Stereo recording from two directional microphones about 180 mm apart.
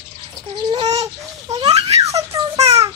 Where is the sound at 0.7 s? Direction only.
20° right (ahead or behind).